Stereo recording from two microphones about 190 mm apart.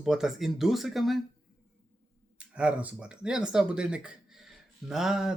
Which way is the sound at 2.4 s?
5° right (ahead or behind).